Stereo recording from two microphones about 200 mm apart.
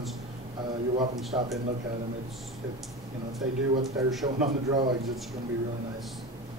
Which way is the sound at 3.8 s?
Centre (ahead or behind).